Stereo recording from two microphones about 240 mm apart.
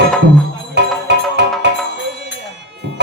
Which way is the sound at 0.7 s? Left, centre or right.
Right.